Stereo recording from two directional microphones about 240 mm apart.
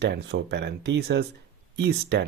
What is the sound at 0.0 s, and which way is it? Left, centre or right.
Speech, right.